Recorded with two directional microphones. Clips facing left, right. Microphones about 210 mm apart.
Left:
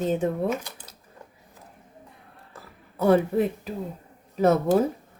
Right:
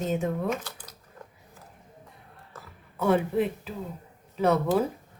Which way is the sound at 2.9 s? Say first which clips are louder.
Left 4 dB; 40° left (ahead or behind).